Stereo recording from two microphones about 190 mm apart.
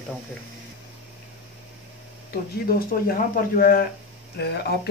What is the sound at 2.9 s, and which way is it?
Speech, 50° left (ahead or behind).